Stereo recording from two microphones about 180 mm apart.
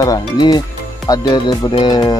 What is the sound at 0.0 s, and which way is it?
Speech, 20° left (ahead or behind).